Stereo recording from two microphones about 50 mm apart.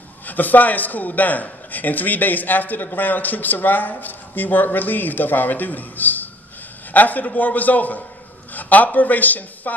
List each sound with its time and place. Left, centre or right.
0.3 s a man's voice: left